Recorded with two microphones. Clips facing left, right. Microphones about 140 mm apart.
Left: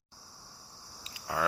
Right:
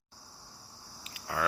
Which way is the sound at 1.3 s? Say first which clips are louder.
Left 1 dB; 20° left (ahead or behind).